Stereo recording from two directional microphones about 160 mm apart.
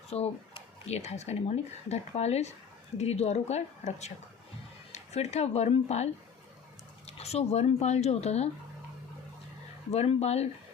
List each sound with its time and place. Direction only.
0.1 s speech: 40° left (ahead or behind)
7.2 s speech: 40° left (ahead or behind)
9.9 s speech: 40° left (ahead or behind)